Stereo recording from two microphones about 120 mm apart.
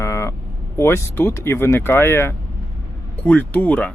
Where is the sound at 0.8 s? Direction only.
20° left (ahead or behind).